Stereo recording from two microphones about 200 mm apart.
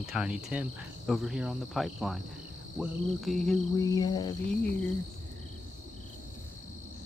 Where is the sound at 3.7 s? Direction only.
20° left (ahead or behind).